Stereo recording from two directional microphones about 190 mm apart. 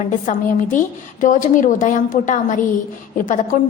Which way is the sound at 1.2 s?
45° left (ahead or behind).